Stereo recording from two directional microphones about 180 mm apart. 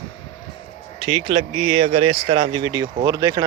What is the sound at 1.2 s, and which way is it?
Speech, 30° right (ahead or behind).